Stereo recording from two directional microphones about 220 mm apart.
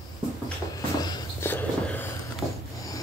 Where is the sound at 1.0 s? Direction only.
15° left (ahead or behind).